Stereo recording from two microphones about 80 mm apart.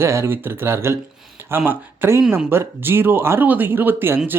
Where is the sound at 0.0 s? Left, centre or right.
Right.